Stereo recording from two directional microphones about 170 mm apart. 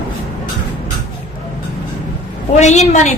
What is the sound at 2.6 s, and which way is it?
Speech, 40° left (ahead or behind).